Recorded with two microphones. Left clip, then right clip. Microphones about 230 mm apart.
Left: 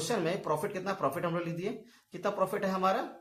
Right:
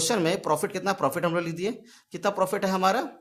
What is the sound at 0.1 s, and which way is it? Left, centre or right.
Speech, right.